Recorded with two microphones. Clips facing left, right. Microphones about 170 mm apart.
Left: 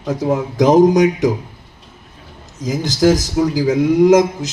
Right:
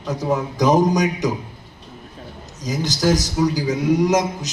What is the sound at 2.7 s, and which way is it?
Speech, 90° left.